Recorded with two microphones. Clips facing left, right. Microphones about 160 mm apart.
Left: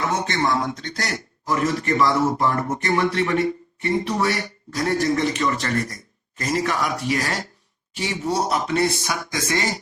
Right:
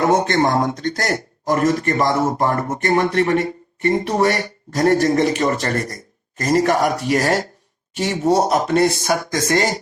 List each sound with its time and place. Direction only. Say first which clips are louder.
0.0 s speech: right 7 dB; 45° right (ahead or behind)